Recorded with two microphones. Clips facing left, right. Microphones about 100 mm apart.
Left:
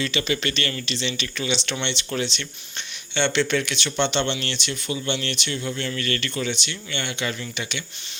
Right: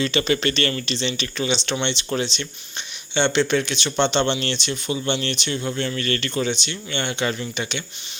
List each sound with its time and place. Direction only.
0.0 s speech: 35° right (ahead or behind)